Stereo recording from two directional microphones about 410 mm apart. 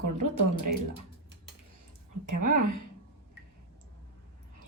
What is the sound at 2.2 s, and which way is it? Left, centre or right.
Speech, right.